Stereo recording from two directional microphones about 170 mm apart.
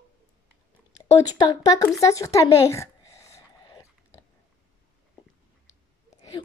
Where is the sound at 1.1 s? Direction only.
20° left (ahead or behind).